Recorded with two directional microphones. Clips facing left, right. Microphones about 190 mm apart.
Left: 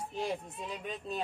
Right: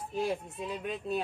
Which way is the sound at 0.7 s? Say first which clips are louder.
Right 5 dB; 10° right (ahead or behind).